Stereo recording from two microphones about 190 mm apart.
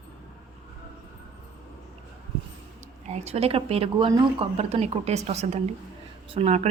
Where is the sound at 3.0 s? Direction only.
35° right (ahead or behind).